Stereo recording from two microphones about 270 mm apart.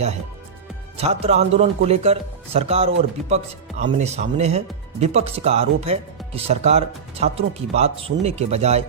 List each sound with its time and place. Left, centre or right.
0.9 s speech: right